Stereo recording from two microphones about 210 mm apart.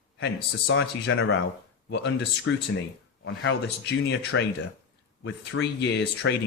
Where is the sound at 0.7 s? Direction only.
60° left (ahead or behind).